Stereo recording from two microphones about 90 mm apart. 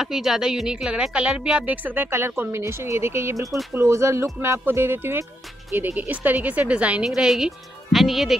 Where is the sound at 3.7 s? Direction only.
30° right (ahead or behind); by 8.3 s centre (ahead or behind).